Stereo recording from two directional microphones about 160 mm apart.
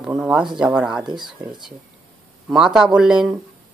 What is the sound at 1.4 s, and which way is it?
Speech, 20° right (ahead or behind).